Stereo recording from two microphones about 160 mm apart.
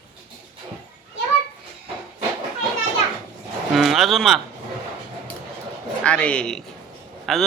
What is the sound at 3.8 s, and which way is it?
Speech, centre (ahead or behind).